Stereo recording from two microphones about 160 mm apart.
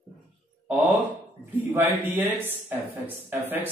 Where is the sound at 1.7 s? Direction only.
10° right (ahead or behind).